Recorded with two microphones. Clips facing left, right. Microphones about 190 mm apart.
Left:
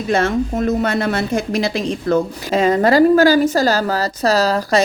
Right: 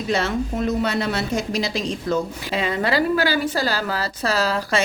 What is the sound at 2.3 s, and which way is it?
A woman's voice, 45° left (ahead or behind).